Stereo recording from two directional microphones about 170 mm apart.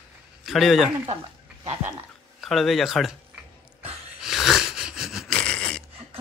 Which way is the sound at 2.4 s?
Centre (ahead or behind).